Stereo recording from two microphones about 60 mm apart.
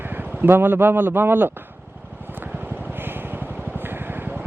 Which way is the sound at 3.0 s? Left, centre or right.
Right.